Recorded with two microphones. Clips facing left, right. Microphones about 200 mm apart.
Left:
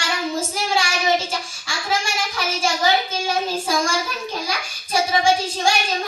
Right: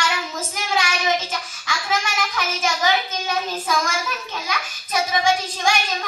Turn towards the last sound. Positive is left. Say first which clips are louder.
# left 2 dB
turn(degrees=30)  # may be behind; listen again after turning